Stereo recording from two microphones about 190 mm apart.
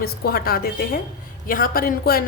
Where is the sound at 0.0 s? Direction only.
50° left (ahead or behind).